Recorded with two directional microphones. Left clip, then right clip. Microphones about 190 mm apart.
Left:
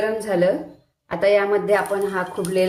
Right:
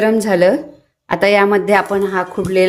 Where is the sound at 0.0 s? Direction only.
55° right (ahead or behind).